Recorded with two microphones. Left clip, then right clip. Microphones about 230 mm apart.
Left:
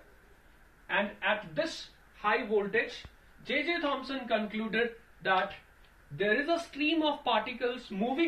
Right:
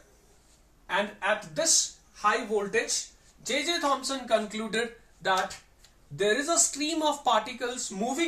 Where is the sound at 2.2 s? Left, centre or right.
Centre.